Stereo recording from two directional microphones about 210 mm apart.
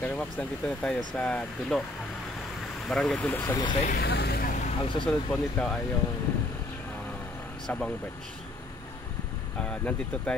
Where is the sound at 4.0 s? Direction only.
50° left (ahead or behind).